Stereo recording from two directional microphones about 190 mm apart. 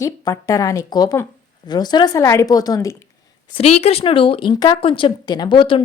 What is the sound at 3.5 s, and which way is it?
A woman's voice, 35° left (ahead or behind).